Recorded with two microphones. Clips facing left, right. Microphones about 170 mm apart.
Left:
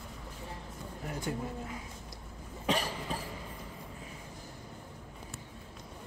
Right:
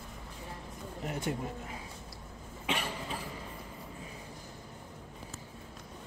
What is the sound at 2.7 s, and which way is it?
Cough, 40° left (ahead or behind).